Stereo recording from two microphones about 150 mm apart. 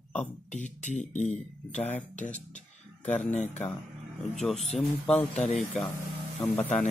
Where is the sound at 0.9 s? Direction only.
50° left (ahead or behind).